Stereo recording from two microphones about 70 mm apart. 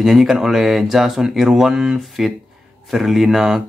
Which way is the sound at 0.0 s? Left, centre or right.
Centre.